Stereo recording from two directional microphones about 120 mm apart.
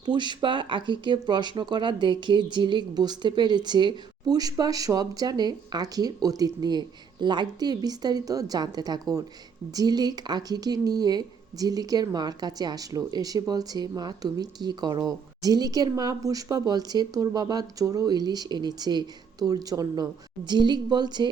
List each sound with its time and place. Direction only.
0.0 s speech: 40° right (ahead or behind)